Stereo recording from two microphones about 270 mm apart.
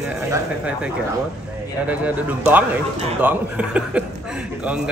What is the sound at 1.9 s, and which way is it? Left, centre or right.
A man's voice, centre.